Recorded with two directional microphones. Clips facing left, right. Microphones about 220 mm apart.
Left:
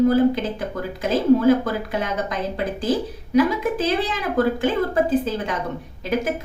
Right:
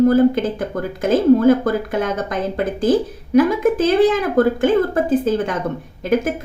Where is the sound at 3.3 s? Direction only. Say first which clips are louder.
Right 5 dB; 50° right (ahead or behind).